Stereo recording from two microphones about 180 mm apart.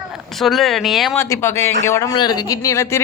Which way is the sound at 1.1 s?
15° left (ahead or behind).